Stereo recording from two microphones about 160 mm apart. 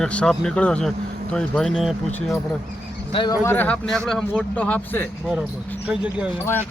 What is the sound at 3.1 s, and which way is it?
Speech, 30° left (ahead or behind).